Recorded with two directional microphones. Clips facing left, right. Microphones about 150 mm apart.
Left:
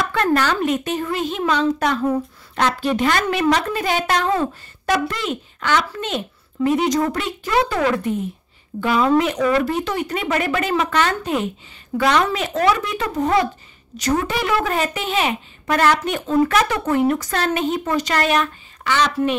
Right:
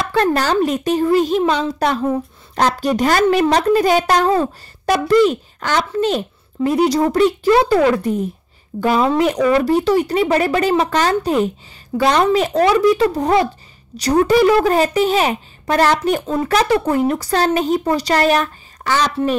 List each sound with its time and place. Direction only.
0.1 s a woman's voice: 35° right (ahead or behind)